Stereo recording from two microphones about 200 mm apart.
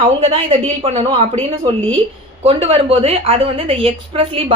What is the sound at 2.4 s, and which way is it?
A woman's voice, 30° right (ahead or behind).